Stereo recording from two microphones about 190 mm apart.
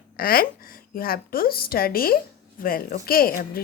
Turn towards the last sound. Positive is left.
turn(degrees=50)  # may be behind; listen again after turning